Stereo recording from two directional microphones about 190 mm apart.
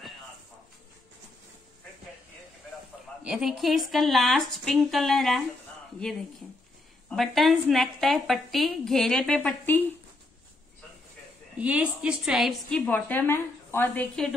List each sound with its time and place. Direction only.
3.3 s a woman's voice: 5° right (ahead or behind)
11.5 s a woman's voice: 5° right (ahead or behind)